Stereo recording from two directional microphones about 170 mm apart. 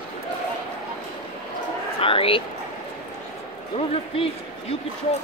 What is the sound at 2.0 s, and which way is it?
Speech, 30° left (ahead or behind).